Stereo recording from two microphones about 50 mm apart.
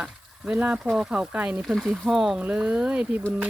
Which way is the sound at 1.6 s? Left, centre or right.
Centre.